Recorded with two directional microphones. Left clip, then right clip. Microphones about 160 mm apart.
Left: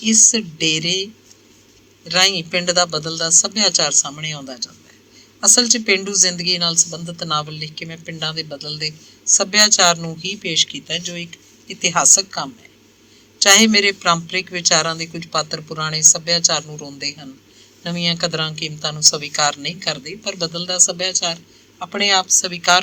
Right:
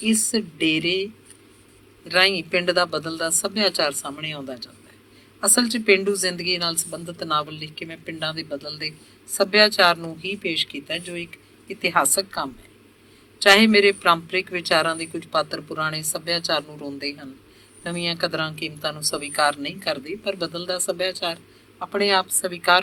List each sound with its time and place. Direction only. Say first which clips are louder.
0.0 s a man's voice: left 9 dB; 20° left (ahead or behind)